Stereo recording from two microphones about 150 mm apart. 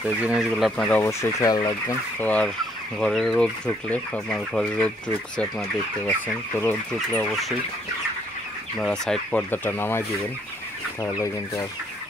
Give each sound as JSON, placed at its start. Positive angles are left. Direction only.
{"t": 0.0, "sound": "speech", "side_deg": -10}
{"t": 0.8, "sound": "speech", "side_deg": 15}
{"t": 2.1, "sound": "speech", "side_deg": 10}
{"t": 7.2, "sound": "speech", "side_deg": 0}
{"t": 8.7, "sound": "speech", "side_deg": 5}